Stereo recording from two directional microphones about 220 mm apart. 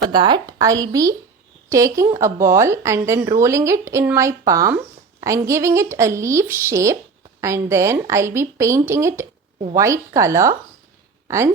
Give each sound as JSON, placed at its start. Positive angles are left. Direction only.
{"t": 0.1, "sound": "speech", "side_deg": -20}